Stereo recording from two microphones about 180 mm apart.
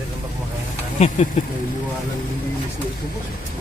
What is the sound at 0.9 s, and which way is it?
Speech, 40° left (ahead or behind).